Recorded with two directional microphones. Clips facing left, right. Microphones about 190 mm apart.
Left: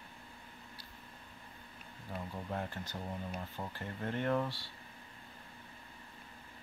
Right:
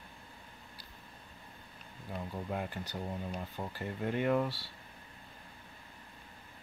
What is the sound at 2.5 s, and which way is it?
Speech, 10° right (ahead or behind).